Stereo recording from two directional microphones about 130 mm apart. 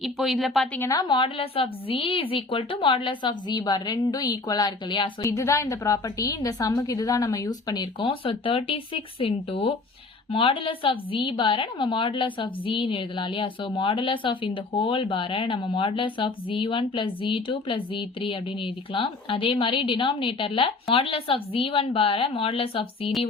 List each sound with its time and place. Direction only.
0.0 s speech: centre (ahead or behind)
0.8 s a woman's voice: 25° left (ahead or behind)
5.2 s a woman's voice: 25° left (ahead or behind); by 23.1 s 45° left (ahead or behind)